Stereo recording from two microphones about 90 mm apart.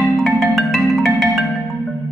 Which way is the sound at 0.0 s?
Centre (ahead or behind).